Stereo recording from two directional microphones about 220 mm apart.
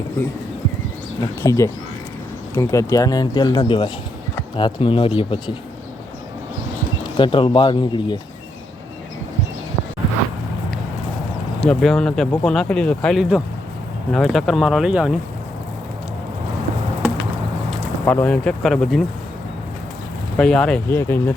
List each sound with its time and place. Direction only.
1.4 s speech: 15° left (ahead or behind)
7.2 s speech: 20° left (ahead or behind)
11.6 s speech: centre (ahead or behind)
18.0 s speech: 5° left (ahead or behind)
20.3 s speech: 5° left (ahead or behind)